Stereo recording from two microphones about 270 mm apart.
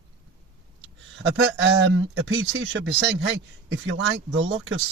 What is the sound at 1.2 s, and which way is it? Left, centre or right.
Speech, right.